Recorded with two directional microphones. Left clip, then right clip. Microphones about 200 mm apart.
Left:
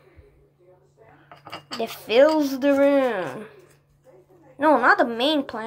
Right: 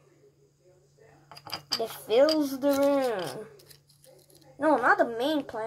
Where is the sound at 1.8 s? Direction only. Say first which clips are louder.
Left 6 dB; 15° left (ahead or behind).